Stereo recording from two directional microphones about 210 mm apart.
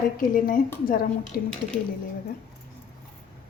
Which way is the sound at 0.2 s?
40° left (ahead or behind).